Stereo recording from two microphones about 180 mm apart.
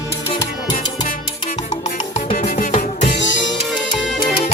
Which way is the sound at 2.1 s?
45° left (ahead or behind).